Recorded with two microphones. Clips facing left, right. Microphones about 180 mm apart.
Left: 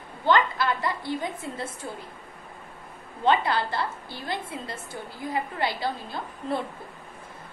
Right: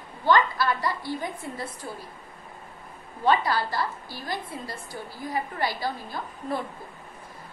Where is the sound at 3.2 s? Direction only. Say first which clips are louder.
Even; 20° left (ahead or behind).